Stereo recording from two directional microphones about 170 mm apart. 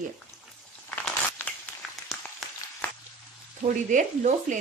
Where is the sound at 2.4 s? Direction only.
Centre (ahead or behind).